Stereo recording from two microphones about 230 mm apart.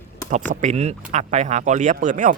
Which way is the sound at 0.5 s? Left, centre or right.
Right.